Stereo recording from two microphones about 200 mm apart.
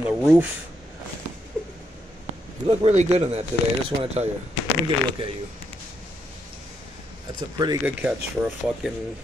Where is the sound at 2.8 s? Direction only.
35° right (ahead or behind).